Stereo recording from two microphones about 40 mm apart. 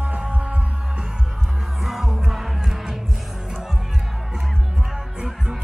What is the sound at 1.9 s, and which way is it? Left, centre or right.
Music, centre.